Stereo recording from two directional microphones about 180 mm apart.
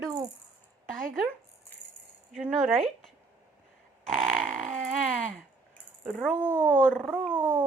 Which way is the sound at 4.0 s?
5° left (ahead or behind).